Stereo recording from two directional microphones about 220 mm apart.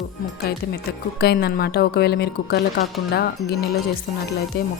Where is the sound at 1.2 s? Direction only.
45° left (ahead or behind).